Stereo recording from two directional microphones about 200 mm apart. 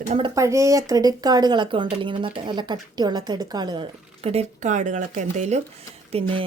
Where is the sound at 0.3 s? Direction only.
15° right (ahead or behind).